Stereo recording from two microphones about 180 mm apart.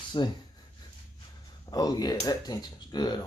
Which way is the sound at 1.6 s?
20° left (ahead or behind).